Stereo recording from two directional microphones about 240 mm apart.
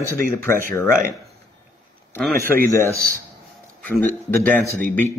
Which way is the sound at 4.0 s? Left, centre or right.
Centre.